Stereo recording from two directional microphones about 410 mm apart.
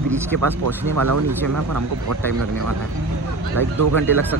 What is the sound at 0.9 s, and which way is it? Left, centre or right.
Speech, right.